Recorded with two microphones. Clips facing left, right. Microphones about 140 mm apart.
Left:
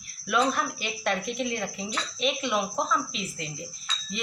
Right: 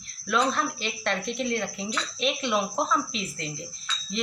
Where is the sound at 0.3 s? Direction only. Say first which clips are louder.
Even; 10° left (ahead or behind).